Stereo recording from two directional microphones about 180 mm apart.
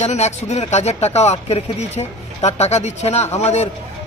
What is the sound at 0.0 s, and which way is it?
Speech, 40° left (ahead or behind).